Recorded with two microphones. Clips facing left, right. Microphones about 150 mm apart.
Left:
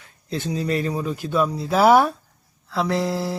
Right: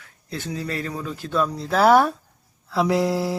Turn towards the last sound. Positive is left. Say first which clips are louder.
# right 2 dB
turn(degrees=-5)  # may be behind; listen again after turning